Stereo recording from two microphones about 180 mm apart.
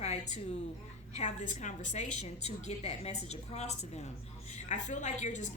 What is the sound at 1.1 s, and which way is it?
A woman's voice, 40° left (ahead or behind).